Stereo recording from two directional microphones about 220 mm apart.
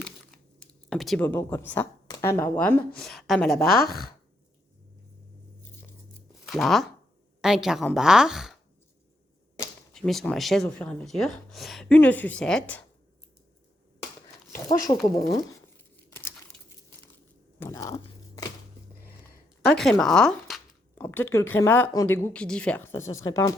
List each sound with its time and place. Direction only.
0.9 s speech: centre (ahead or behind)
3.8 s speech: 45° left (ahead or behind)
6.5 s speech: centre (ahead or behind)
9.9 s speech: centre (ahead or behind)
14.5 s speech: 15° left (ahead or behind)
17.6 s tearing: 15° left (ahead or behind)
19.6 s speech: centre (ahead or behind)